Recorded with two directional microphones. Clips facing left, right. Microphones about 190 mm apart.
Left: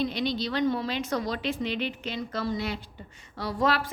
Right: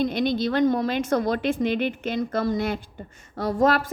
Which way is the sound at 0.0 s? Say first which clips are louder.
Right 5 dB; 50° right (ahead or behind).